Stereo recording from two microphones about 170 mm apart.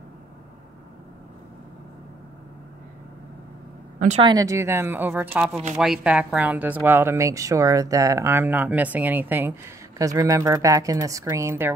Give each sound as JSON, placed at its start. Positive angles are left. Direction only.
{"t": 4.2, "sound": "speech", "side_deg": -20}